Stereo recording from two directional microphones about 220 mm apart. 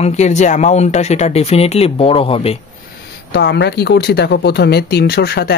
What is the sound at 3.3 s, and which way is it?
Speech, 50° left (ahead or behind).